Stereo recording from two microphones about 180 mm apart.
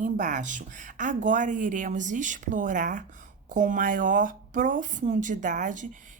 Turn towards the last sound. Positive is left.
turn(degrees=-45)  # may be behind; listen again after turning